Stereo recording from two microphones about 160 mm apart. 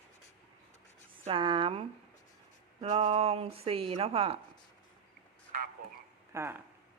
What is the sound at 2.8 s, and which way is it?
A woman's voice, 40° right (ahead or behind).